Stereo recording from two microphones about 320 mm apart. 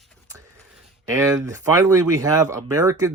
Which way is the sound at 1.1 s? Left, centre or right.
Centre.